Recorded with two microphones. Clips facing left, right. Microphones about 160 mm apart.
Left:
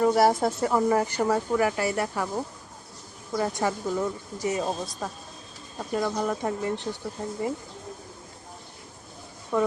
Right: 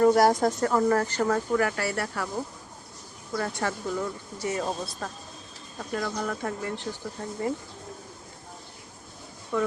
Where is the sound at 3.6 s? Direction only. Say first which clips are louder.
Left 3 dB; 15° left (ahead or behind).